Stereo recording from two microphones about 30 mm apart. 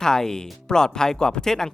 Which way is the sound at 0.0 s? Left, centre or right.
Left.